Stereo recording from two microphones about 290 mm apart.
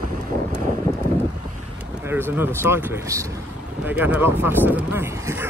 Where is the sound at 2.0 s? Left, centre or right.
Centre.